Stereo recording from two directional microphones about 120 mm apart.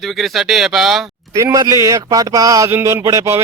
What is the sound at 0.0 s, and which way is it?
Speech, centre (ahead or behind).